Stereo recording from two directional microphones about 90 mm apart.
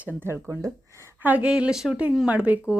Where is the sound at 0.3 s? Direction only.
30° right (ahead or behind).